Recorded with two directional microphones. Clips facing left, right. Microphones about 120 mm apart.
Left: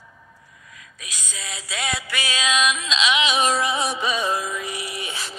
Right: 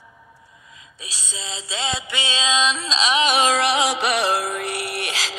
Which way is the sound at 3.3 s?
85° right.